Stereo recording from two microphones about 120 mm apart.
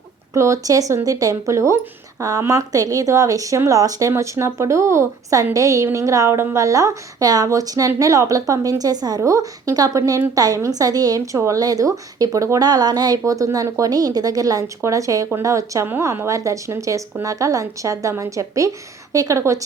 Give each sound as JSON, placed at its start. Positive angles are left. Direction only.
{"t": 0.3, "sound": "a woman's voice", "side_deg": -25}